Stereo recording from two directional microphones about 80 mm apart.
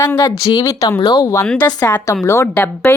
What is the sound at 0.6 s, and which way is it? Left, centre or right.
Speech, left.